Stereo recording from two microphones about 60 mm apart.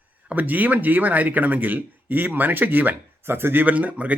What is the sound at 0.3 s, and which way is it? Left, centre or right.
Speech, right.